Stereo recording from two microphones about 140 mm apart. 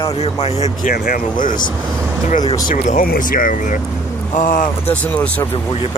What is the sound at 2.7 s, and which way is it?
Speech, 80° left.